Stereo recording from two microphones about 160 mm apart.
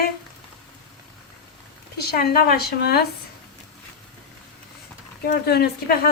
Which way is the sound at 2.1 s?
70° left (ahead or behind).